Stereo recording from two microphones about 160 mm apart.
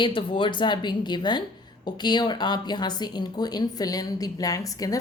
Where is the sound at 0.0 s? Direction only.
30° left (ahead or behind).